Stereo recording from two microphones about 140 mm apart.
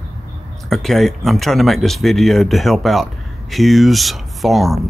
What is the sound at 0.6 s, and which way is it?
Speech, centre (ahead or behind).